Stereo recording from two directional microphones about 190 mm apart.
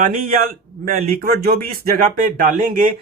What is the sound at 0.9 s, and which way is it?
Speech, 50° right (ahead or behind).